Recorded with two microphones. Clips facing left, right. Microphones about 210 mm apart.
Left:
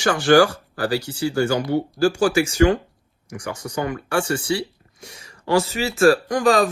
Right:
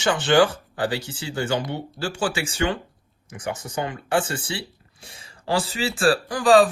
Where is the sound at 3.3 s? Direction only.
20° right (ahead or behind).